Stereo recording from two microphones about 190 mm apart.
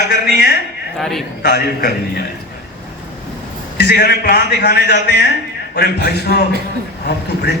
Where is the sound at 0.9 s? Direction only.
Centre (ahead or behind).